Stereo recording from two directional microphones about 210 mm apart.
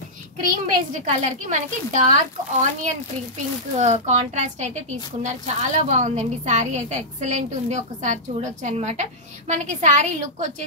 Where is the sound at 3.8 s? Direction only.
30° right (ahead or behind).